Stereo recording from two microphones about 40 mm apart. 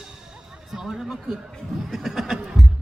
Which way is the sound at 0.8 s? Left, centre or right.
Centre.